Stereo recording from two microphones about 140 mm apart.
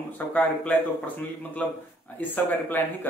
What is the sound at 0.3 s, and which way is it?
Speech, 10° left (ahead or behind).